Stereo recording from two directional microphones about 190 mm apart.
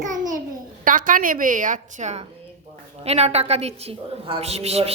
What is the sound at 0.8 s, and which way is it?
A woman's voice, 45° right (ahead or behind).